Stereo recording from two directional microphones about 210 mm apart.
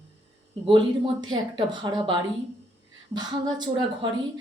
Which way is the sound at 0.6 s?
25° right (ahead or behind).